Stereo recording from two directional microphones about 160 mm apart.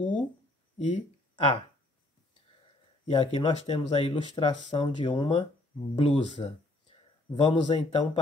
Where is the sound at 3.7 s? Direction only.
35° left (ahead or behind).